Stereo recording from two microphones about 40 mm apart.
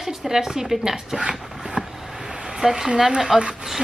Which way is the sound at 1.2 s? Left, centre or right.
Centre.